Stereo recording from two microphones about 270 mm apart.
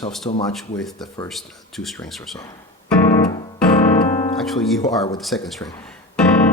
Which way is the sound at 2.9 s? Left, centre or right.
Centre.